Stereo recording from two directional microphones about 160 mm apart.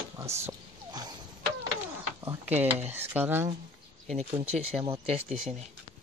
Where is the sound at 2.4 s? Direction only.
10° right (ahead or behind).